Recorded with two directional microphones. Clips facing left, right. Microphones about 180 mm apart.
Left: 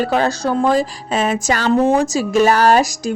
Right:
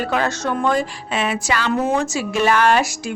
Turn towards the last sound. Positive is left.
turn(degrees=40)  # may be behind; listen again after turning